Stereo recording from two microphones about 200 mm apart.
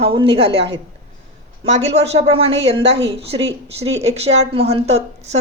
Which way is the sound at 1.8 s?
30° right (ahead or behind).